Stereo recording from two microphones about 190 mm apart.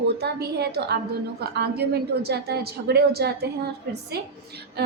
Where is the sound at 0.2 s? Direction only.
60° right (ahead or behind).